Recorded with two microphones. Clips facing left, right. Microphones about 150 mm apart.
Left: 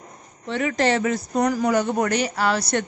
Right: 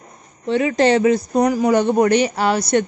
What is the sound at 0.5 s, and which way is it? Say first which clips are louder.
Speech: right 6 dB; 20° right (ahead or behind).